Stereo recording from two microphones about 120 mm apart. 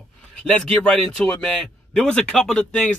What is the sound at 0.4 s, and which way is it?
A man's voice, 10° left (ahead or behind).